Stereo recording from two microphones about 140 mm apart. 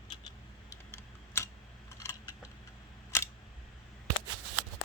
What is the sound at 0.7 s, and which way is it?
Typing, 20° left (ahead or behind).